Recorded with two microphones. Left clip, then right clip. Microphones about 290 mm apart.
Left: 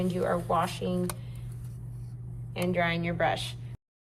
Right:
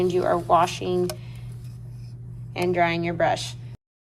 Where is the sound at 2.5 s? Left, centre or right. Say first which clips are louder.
Right 6 dB; centre.